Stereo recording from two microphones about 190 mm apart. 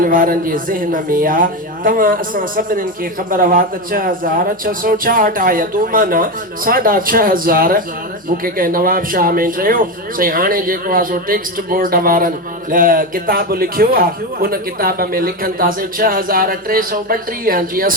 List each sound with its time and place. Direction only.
0.0 s speech: 45° right (ahead or behind)